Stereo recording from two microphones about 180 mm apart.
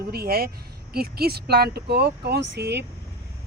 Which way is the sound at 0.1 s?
60° right (ahead or behind).